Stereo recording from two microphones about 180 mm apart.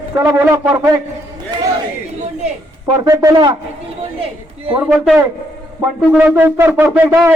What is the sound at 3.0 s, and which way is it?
Speech, 20° right (ahead or behind).